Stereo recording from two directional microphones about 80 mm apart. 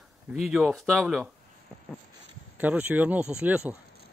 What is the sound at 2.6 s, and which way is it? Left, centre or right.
Speech, right.